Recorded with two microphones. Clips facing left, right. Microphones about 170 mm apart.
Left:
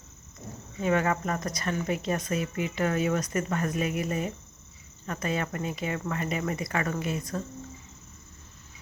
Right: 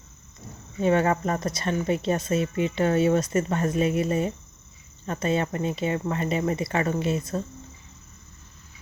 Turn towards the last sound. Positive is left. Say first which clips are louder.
# right 5 dB
turn(degrees=-25)  # may be behind; listen again after turning